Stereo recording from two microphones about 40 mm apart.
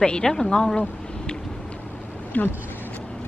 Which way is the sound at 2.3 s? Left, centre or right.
Left.